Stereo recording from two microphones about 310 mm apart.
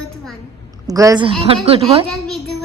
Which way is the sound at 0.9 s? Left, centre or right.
Centre.